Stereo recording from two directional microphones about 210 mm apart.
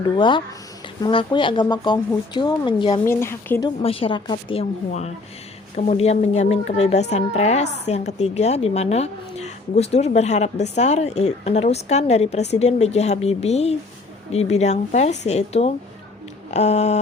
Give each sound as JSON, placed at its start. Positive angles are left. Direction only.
{"t": 0.2, "sound": "speech", "side_deg": 20}
{"t": 3.1, "sound": "a woman's voice", "side_deg": 10}
{"t": 3.8, "sound": "speech", "side_deg": 25}